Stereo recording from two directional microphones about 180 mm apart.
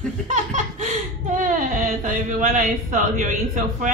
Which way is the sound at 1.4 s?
50° right (ahead or behind).